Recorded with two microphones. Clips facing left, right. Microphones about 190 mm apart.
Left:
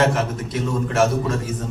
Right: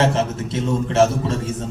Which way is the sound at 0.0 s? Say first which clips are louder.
Right 1 dB; 25° right (ahead or behind).